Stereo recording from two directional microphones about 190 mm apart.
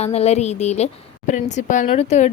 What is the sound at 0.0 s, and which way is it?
Speech, 35° left (ahead or behind).